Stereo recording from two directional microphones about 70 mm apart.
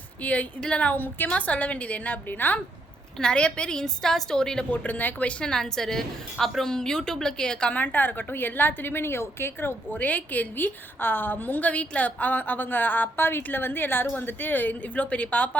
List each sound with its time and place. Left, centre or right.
0.2 s a woman's voice: centre
3.2 s a woman's voice: centre